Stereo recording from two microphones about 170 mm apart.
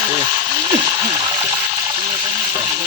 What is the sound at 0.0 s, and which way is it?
Ratchet, 20° right (ahead or behind).